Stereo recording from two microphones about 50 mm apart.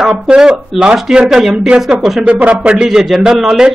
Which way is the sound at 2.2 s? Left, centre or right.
Right.